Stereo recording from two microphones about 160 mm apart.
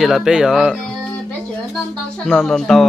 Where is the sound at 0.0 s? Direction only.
Centre (ahead or behind).